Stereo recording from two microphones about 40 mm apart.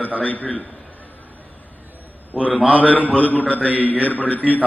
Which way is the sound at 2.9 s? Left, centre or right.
Left.